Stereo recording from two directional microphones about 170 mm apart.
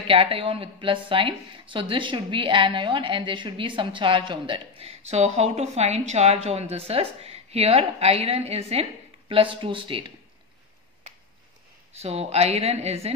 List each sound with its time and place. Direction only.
0.0 s a woman's voice: 35° right (ahead or behind)
12.0 s a woman's voice: 40° right (ahead or behind)